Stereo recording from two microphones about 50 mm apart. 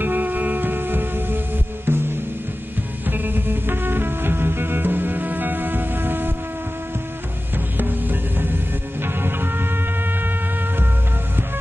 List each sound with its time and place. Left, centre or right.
0.0 s music: right
7.5 s music: right